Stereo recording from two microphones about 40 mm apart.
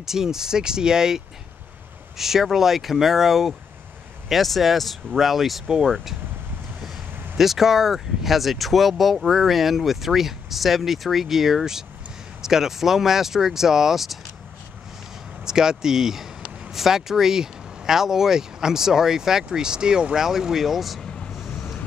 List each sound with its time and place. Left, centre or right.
0.0 s speech: centre
7.3 s speech: centre
15.4 s speech: centre
20.2 s speech: centre
21.0 s vehicle: centre